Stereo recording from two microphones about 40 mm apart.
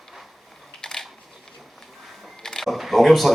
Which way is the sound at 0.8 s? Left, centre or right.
Centre.